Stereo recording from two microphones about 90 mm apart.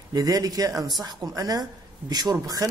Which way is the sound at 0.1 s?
45° right (ahead or behind).